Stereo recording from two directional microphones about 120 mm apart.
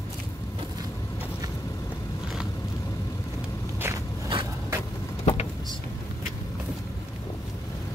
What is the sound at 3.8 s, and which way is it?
Walk, 20° right (ahead or behind).